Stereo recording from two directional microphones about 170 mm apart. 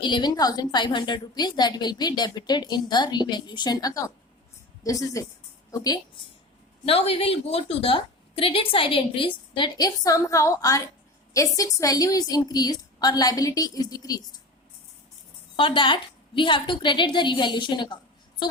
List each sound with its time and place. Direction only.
0.0 s a woman's voice: 25° left (ahead or behind)
6.8 s a woman's voice: 35° left (ahead or behind)
15.5 s a woman's voice: 30° left (ahead or behind)